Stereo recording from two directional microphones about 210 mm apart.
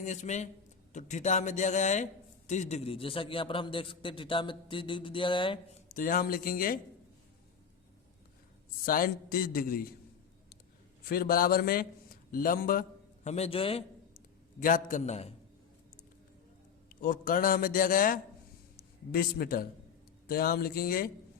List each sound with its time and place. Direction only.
0.0 s a man's voice: 35° left (ahead or behind)
5.9 s a man's voice: 40° left (ahead or behind)
8.9 s a man's voice: 40° left (ahead or behind)
11.1 s a man's voice: 45° left (ahead or behind)
13.2 s a man's voice: 30° left (ahead or behind)
14.6 s a man's voice: 40° left (ahead or behind)
16.9 s a man's voice: 45° left (ahead or behind)